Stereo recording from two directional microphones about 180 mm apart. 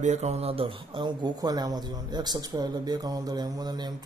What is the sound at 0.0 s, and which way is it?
Speech, 40° right (ahead or behind).